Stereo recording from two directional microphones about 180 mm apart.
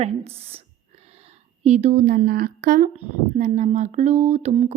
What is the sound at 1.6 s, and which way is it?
Speech, 40° right (ahead or behind).